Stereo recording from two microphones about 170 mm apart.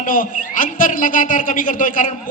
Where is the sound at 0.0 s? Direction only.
55° left (ahead or behind).